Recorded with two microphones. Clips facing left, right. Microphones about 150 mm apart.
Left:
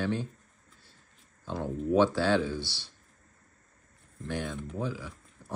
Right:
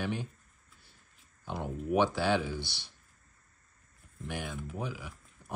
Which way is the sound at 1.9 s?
15° right (ahead or behind).